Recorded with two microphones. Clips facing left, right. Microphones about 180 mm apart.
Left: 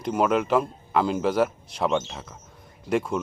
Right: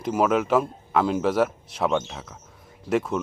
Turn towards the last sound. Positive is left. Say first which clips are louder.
# right 1 dB
turn(degrees=0)  # may be behind; listen again after turning